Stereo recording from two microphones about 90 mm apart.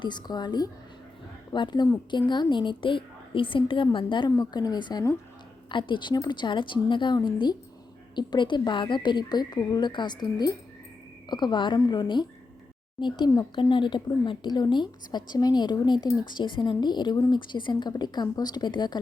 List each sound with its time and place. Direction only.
0.0 s a woman's voice: 55° left (ahead or behind)
4.4 s a woman's voice: 50° left (ahead or behind)